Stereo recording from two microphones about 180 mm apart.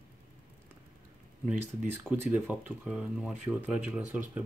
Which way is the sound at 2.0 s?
5° right (ahead or behind).